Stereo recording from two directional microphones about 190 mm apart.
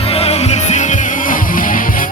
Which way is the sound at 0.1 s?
35° left (ahead or behind).